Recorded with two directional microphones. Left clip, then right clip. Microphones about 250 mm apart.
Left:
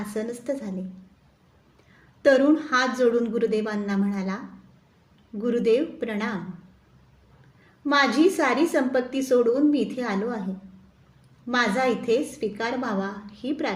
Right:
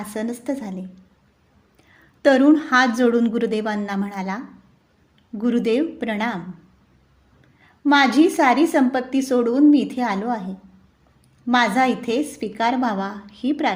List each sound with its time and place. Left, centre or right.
0.1 s a woman's voice: right
2.2 s a woman's voice: right
5.4 s a woman's voice: right
7.9 s a woman's voice: right
11.4 s a woman's voice: right